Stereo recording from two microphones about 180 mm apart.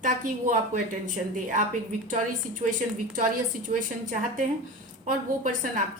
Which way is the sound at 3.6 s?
45° right (ahead or behind).